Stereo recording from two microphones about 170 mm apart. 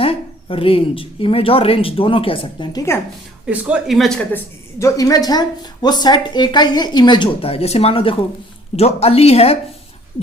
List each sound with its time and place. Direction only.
0.0 s speech: 35° left (ahead or behind)
3.4 s speech: 5° right (ahead or behind); by 9.6 s 35° left (ahead or behind)